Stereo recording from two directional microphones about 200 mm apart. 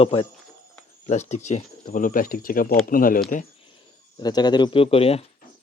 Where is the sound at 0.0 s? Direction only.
30° left (ahead or behind); by 3.4 s 45° left (ahead or behind).